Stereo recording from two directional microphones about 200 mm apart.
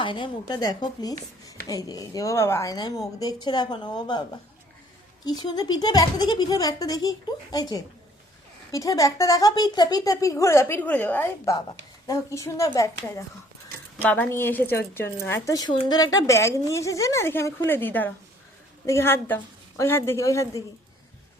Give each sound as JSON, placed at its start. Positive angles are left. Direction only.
{"t": 0.0, "sound": "a woman's voice", "side_deg": 25}
{"t": 5.2, "sound": "a woman's voice", "side_deg": 20}